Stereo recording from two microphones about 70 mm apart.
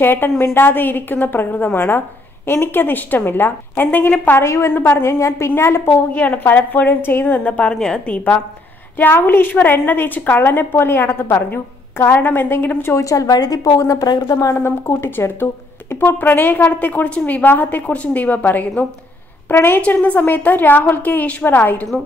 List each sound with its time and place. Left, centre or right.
0.0 s a woman's voice: left
4.4 s a woman's voice: left
5.9 s a woman's voice: left
8.9 s a woman's voice: left
13.0 s a woman's voice: left
14.3 s a woman's voice: left
19.8 s speech: left